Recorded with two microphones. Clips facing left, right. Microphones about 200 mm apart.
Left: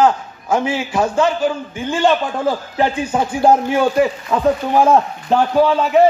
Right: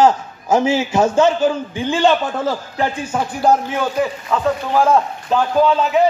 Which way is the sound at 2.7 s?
25° left (ahead or behind).